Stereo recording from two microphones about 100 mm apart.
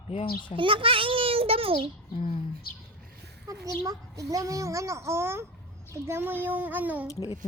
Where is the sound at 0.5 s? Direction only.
60° right (ahead or behind).